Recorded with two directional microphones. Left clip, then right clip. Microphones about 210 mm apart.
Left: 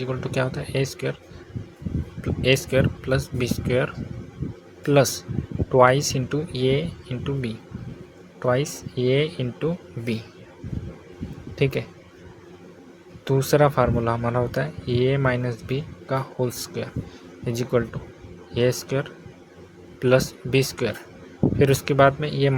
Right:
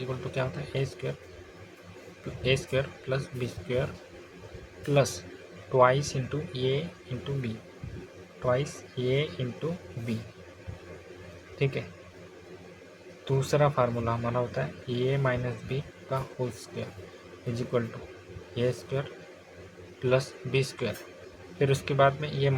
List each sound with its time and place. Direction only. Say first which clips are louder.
0.0 s speech: left 7 dB; 35° left (ahead or behind)
2.4 s speech: left 7 dB; 35° left (ahead or behind)
11.5 s speech: left 7 dB; 40° left (ahead or behind)
13.2 s speech: left 7 dB; 35° left (ahead or behind)